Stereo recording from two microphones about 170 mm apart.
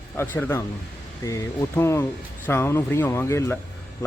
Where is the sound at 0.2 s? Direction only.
15° left (ahead or behind).